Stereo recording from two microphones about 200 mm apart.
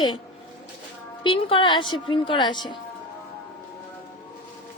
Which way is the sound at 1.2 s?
25° left (ahead or behind).